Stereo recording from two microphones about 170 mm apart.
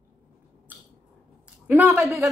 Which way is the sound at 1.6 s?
10° right (ahead or behind).